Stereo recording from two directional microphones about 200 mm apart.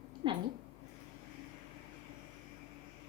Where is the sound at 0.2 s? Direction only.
25° right (ahead or behind).